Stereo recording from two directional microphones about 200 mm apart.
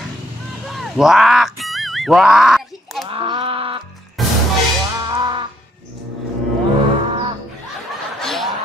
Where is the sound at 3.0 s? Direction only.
25° right (ahead or behind).